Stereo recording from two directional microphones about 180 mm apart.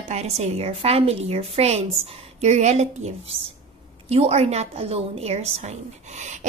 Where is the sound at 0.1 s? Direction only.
35° right (ahead or behind).